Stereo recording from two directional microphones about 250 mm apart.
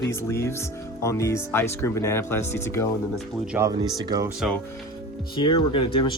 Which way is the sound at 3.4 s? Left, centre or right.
Centre.